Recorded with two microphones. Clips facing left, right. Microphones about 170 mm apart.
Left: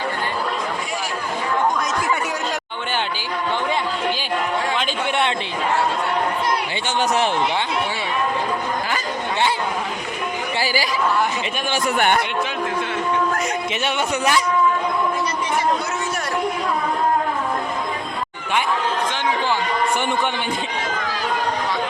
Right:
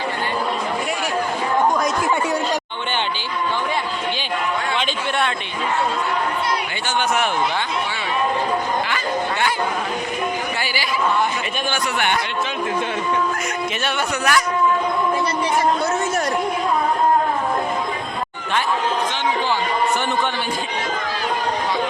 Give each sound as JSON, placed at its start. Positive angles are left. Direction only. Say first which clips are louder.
{"t": 11.9, "sound": "speech", "louder": "left 4 dB", "side_deg": 45}
{"t": 13.8, "sound": "speech", "louder": "left 1 dB", "side_deg": 25}